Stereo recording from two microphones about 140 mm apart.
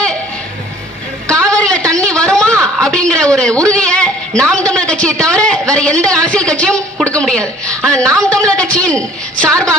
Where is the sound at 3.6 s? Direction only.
5° left (ahead or behind).